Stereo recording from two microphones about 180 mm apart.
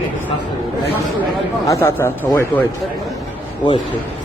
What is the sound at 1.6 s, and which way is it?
Speech, 10° left (ahead or behind).